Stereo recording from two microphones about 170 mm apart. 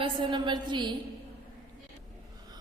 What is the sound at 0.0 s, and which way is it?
Speech, 25° right (ahead or behind).